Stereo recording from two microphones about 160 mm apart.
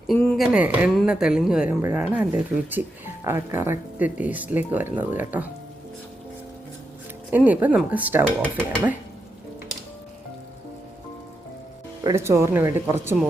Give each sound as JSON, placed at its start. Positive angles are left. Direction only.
{"t": 0.3, "sound": "a woman's voice", "side_deg": -5}
{"t": 7.3, "sound": "speech", "side_deg": -10}
{"t": 8.4, "sound": "speech", "side_deg": 10}
{"t": 12.0, "sound": "speech", "side_deg": -15}